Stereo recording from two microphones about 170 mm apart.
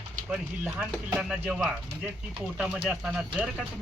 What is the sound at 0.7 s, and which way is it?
Speech, 15° right (ahead or behind).